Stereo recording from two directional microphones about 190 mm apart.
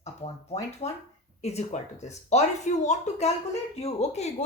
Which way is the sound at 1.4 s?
35° left (ahead or behind).